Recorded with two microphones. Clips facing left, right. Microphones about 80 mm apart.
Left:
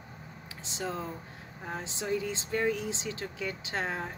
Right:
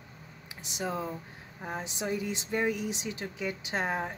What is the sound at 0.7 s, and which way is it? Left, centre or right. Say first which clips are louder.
Speech: right 2 dB; centre.